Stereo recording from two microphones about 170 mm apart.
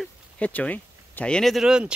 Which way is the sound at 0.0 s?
10° left (ahead or behind).